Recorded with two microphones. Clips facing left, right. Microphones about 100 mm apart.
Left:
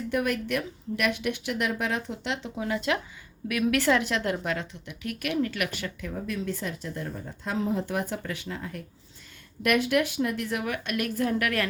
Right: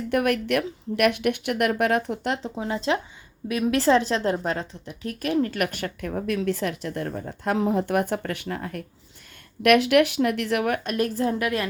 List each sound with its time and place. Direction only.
0.1 s a woman's voice: 60° right (ahead or behind); by 2.5 s 45° right (ahead or behind)
2.6 s a woman's voice: 30° right (ahead or behind); by 8.8 s 60° right (ahead or behind)
9.6 s speech: 75° right (ahead or behind)
10.8 s a woman's voice: 30° right (ahead or behind)